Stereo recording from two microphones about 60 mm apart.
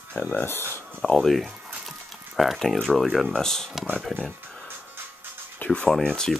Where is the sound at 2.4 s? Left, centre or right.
Centre.